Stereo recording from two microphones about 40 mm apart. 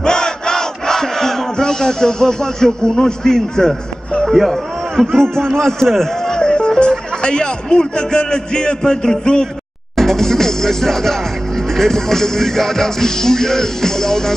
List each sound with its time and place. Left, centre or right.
0.0 s battle cry: centre
4.3 s a man's voice: centre
6.3 s music: left
6.8 s a man's voice: left
9.9 s music: centre